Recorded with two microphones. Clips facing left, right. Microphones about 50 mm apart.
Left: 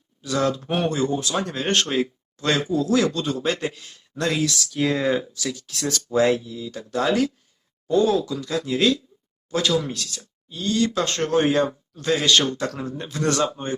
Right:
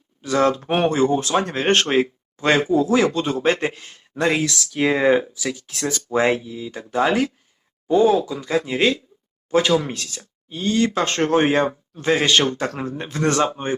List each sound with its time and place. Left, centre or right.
0.2 s speech: right
5.5 s speech: centre
6.1 s speech: right